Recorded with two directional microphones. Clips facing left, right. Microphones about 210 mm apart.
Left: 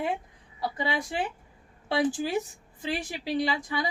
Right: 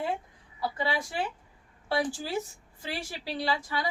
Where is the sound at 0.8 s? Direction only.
20° left (ahead or behind).